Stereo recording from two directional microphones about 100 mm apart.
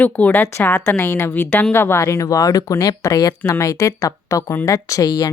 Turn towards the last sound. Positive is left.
turn(degrees=40)  # may be behind; listen again after turning